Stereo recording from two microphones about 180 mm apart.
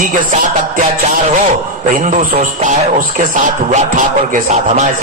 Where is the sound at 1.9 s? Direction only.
45° right (ahead or behind).